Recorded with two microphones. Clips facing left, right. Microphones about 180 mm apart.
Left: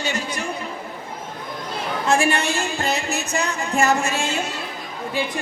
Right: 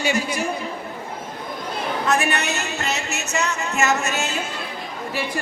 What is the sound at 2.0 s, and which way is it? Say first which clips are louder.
Speech: left 3 dB; 30° left (ahead or behind).